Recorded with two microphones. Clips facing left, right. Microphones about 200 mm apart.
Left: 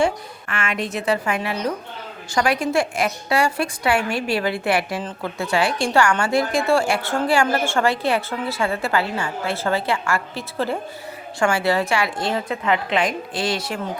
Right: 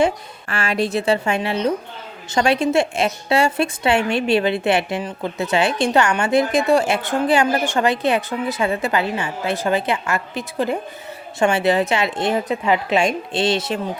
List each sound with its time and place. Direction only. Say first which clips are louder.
0.4 s a woman's voice: right 5 dB; 35° right (ahead or behind)